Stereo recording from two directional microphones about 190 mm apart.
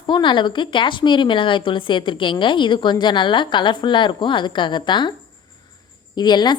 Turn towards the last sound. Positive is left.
turn(degrees=25)  # may be behind; listen again after turning